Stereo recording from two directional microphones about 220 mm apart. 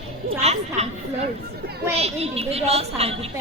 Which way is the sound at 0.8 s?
30° right (ahead or behind).